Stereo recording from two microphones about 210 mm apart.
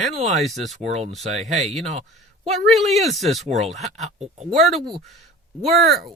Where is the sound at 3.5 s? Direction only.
30° right (ahead or behind).